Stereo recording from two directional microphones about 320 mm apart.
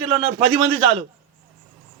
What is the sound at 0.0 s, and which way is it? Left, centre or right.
Speech, centre.